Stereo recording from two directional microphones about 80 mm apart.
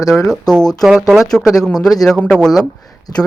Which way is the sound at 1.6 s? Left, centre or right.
Centre.